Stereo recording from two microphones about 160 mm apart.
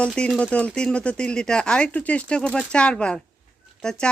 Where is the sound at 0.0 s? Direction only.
5° left (ahead or behind).